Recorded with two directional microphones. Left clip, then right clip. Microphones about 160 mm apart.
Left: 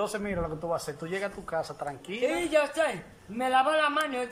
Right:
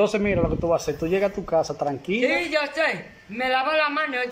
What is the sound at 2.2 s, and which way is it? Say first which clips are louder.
Speech: right 2 dB; 10° left (ahead or behind).